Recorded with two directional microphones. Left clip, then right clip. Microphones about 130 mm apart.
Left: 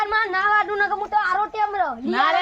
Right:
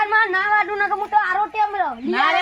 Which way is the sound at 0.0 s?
40° left (ahead or behind).